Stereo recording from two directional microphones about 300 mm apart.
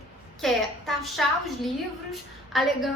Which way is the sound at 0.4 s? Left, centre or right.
Centre.